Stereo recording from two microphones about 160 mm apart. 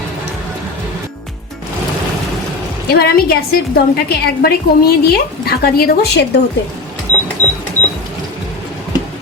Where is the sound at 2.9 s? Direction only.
75° left (ahead or behind).